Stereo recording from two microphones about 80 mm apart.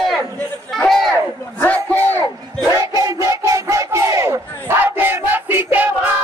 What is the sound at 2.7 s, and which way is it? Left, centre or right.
Battle cry, right.